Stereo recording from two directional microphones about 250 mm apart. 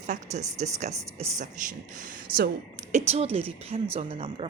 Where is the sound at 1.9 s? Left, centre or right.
Right.